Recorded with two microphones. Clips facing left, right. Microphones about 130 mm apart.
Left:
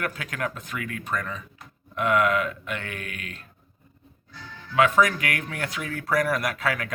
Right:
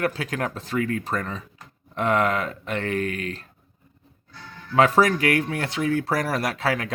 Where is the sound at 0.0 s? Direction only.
30° right (ahead or behind).